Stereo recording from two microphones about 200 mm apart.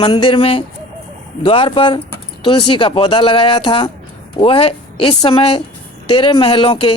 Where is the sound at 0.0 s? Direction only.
25° left (ahead or behind).